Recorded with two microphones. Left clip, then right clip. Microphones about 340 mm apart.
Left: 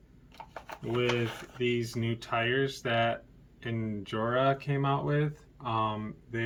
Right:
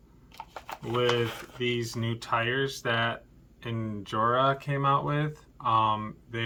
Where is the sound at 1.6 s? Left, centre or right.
Centre.